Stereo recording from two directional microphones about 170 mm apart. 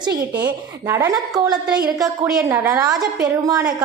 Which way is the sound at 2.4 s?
10° right (ahead or behind).